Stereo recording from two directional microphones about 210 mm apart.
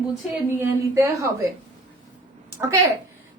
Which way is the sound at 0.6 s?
15° right (ahead or behind).